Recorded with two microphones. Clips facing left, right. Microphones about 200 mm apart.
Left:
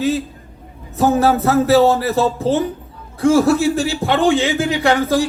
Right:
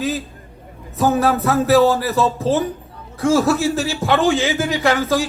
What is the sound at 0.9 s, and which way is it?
A man's voice, 25° left (ahead or behind).